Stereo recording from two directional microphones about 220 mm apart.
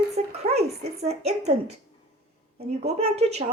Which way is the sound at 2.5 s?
30° right (ahead or behind).